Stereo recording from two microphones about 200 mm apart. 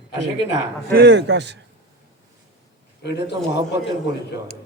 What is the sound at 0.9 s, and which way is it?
Speech, 55° right (ahead or behind).